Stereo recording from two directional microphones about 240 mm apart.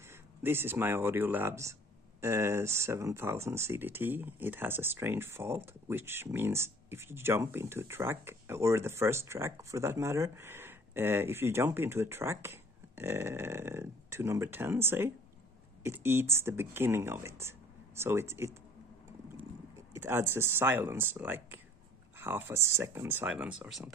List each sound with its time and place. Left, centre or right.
0.4 s speech: centre
19.9 s speech: centre